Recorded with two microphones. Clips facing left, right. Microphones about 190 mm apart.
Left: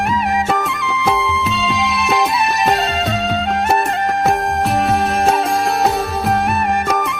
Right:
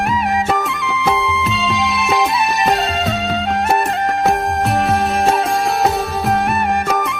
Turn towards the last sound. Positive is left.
turn(degrees=0)  # may be behind; listen again after turning